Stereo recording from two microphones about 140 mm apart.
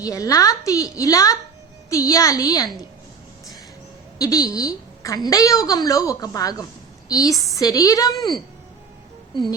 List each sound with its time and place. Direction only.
0.0 s a woman's voice: 25° left (ahead or behind)
4.2 s a woman's voice: 25° left (ahead or behind)
9.3 s a woman's voice: 30° left (ahead or behind)